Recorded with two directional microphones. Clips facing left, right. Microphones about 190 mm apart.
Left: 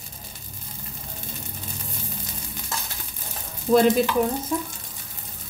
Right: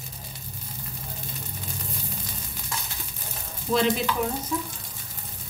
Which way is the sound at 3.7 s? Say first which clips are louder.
Left 6 dB; 45° left (ahead or behind).